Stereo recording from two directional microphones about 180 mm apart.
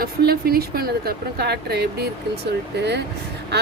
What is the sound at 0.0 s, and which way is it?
Speech, 55° right (ahead or behind).